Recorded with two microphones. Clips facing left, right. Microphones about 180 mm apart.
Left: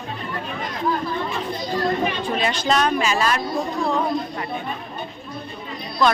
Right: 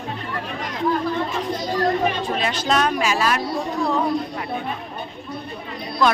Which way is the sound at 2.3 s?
5° right (ahead or behind).